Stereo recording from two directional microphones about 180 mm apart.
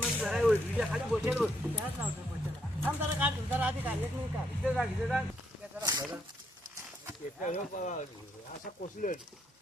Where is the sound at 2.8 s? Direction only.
10° right (ahead or behind).